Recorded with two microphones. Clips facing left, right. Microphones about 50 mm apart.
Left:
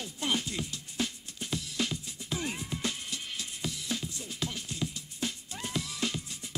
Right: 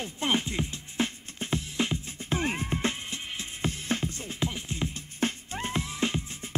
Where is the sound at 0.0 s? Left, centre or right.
Right.